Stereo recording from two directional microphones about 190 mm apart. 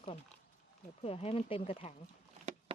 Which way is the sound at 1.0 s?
30° left (ahead or behind).